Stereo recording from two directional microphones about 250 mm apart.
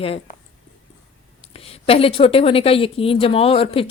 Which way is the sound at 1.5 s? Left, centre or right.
Left.